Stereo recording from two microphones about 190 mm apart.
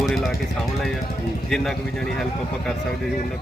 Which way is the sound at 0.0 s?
Centre (ahead or behind).